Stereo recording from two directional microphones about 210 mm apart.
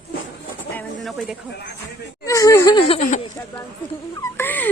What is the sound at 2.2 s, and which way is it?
Speech, 15° left (ahead or behind).